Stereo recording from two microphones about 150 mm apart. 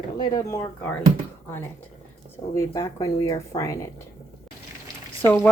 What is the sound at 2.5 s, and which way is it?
Speech, 20° left (ahead or behind).